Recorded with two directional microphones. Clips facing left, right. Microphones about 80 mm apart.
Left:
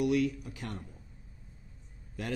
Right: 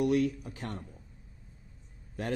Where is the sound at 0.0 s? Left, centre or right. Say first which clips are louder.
Right 1 dB; right.